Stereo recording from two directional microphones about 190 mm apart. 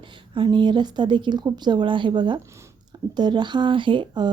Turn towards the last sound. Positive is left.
turn(degrees=-25)  # may be behind; listen again after turning